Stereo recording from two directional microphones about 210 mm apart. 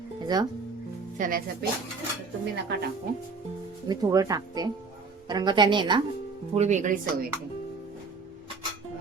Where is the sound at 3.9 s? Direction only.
15° right (ahead or behind).